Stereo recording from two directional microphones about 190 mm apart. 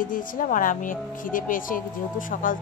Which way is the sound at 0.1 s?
45° left (ahead or behind).